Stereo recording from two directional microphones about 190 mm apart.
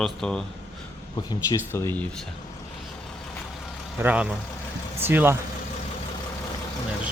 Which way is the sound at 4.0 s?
5° right (ahead or behind).